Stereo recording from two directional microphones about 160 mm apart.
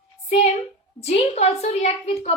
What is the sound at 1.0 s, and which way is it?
A woman's voice, 40° left (ahead or behind).